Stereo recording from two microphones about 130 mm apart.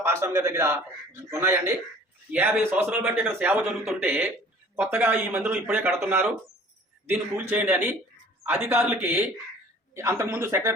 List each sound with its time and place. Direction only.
0.0 s a man's voice: 20° right (ahead or behind)